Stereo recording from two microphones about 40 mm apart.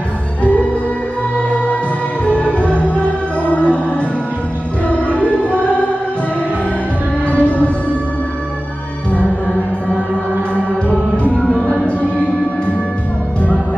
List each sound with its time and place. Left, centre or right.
2.2 s music: left
4.8 s music: left
7.2 s music: left
11.3 s music: left